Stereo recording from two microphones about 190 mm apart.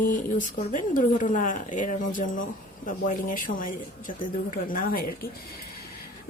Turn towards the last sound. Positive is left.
turn(degrees=50)  # may be behind; listen again after turning